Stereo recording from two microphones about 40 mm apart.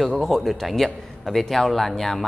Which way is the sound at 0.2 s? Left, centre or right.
Centre.